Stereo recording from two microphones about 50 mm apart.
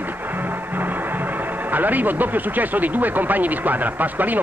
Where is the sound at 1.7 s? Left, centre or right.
Right.